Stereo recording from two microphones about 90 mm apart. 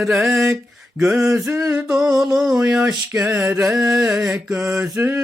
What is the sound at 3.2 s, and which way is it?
Mantra, 20° right (ahead or behind).